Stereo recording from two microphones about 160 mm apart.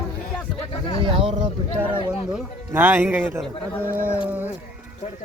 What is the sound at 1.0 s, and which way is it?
Speech, 35° right (ahead or behind).